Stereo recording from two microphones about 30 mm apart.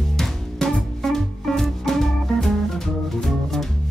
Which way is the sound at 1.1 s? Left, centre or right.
Centre.